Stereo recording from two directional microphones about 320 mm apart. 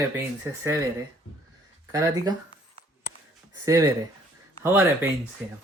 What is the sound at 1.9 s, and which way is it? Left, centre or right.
Speech, centre.